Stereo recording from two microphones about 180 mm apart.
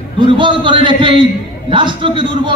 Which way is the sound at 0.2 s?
25° right (ahead or behind).